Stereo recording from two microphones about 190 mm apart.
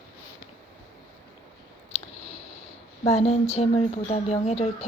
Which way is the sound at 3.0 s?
35° left (ahead or behind).